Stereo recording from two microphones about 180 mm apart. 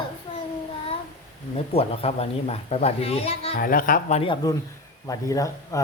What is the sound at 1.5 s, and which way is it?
A woman's voice, 35° left (ahead or behind).